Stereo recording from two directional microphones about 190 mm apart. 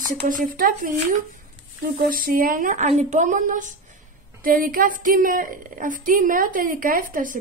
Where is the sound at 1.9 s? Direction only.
45° right (ahead or behind).